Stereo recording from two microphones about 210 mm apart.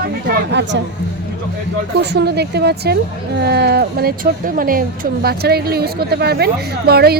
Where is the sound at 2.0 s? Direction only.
50° right (ahead or behind).